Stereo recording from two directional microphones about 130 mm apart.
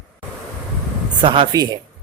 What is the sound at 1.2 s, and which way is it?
Speech, 40° right (ahead or behind).